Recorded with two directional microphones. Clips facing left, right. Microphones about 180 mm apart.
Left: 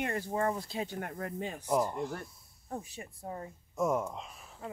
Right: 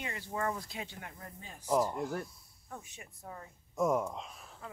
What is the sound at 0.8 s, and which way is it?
Speech, 55° left (ahead or behind).